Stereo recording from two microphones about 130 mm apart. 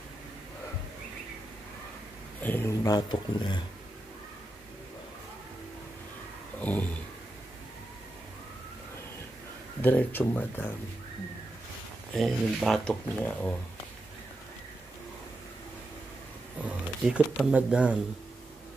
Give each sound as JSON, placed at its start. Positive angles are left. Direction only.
{"t": 2.4, "sound": "speech", "side_deg": 15}
{"t": 2.8, "sound": "speech", "side_deg": 35}
{"t": 6.6, "sound": "speech", "side_deg": 10}
{"t": 9.8, "sound": "speech", "side_deg": 15}
{"t": 12.2, "sound": "speech", "side_deg": 0}
{"t": 16.6, "sound": "a sound", "side_deg": -10}
{"t": 17.4, "sound": "speech", "side_deg": -5}